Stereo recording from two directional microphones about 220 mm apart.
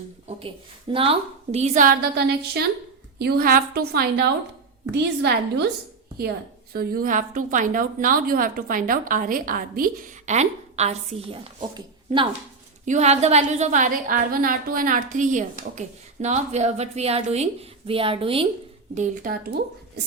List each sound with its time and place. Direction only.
0.3 s a woman's voice: 25° right (ahead or behind); by 5.7 s 50° right (ahead or behind)
6.7 s a woman's voice: 40° right (ahead or behind); by 18.4 s 25° right (ahead or behind)
18.9 s a woman's voice: 35° right (ahead or behind)